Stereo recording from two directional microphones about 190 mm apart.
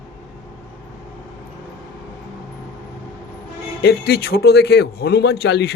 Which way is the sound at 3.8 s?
55° left (ahead or behind).